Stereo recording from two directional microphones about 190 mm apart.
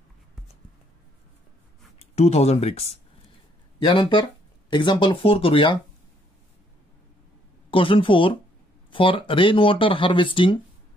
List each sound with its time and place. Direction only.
2.0 s speech: 35° left (ahead or behind)
7.7 s speech: 25° left (ahead or behind)